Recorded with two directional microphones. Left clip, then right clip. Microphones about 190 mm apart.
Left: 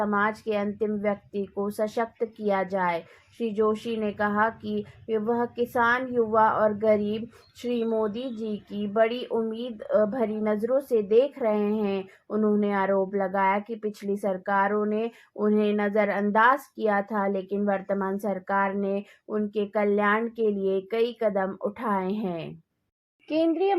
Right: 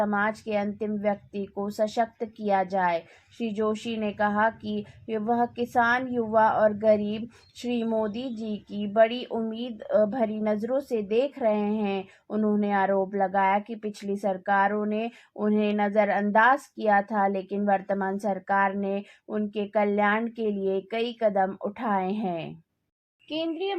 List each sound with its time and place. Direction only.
0.0 s a woman's voice: 25° left (ahead or behind)